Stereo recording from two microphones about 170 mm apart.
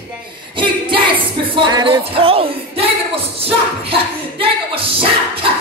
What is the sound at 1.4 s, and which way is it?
Speech, 30° right (ahead or behind).